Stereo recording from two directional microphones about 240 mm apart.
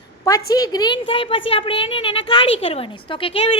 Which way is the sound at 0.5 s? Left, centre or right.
Centre.